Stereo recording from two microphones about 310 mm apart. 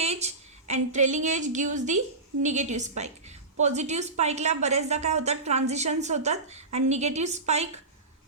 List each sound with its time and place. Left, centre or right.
0.0 s a woman's voice: right